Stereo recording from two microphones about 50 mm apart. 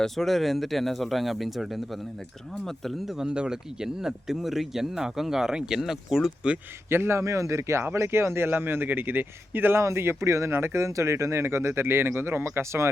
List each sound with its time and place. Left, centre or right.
0.0 s speech: centre
3.1 s speech: centre
6.9 s speech: right
7.9 s a man's voice: right
9.8 s speech: right
10.5 s speech: right